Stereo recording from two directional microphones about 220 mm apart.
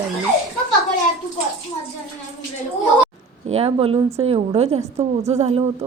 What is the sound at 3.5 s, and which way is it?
A woman's voice, 25° right (ahead or behind).